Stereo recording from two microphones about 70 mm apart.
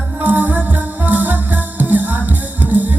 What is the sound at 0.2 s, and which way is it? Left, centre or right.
Music, right.